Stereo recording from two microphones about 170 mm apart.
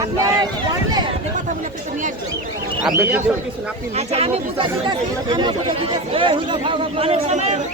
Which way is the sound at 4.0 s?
35° right (ahead or behind).